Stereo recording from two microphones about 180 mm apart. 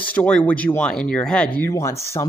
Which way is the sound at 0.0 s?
5° left (ahead or behind).